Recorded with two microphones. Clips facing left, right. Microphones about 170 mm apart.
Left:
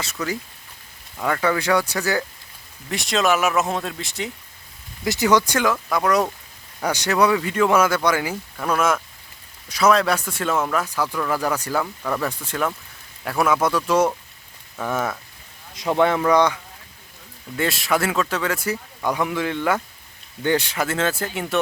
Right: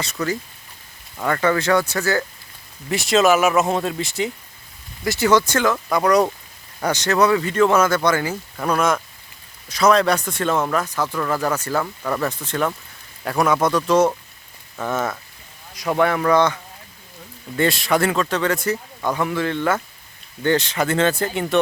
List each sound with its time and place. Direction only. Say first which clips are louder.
0.2 s speech: right 3 dB; 10° left (ahead or behind)
2.9 s speech: right 5 dB; centre (ahead or behind)
5.0 s speech: right 1 dB; 15° left (ahead or behind)
5.7 s speech: right 3 dB; centre (ahead or behind)
12.0 s speech: right 2 dB; 5° right (ahead or behind)
12.3 s speech: right 2 dB; 10° left (ahead or behind)
15.7 s speech: even; 20° left (ahead or behind)
17.6 s speech: right 3 dB; 5° left (ahead or behind)